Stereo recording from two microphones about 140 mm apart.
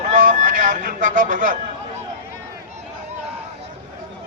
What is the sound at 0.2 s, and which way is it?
Music, 70° right (ahead or behind).